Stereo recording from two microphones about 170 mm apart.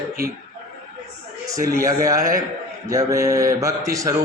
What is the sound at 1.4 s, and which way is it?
A man's voice, 20° right (ahead or behind).